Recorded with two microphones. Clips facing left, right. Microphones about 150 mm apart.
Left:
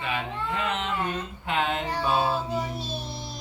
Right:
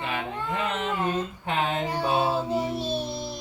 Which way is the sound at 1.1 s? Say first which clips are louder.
Right 3 dB; 40° right (ahead or behind).